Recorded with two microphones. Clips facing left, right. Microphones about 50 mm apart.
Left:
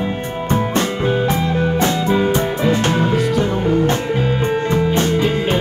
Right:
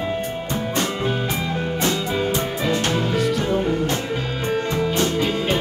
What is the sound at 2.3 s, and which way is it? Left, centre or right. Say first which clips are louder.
Music: left 5 dB; left.